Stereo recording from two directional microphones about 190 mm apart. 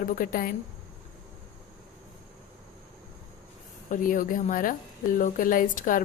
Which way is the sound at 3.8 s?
45° left (ahead or behind).